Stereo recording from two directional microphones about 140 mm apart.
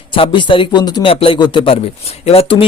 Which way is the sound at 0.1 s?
35° left (ahead or behind).